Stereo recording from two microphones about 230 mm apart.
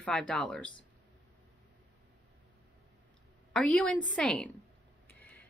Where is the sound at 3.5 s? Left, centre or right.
Centre.